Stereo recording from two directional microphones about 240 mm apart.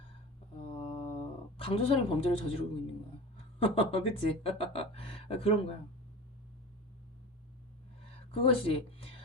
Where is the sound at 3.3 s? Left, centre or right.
Left.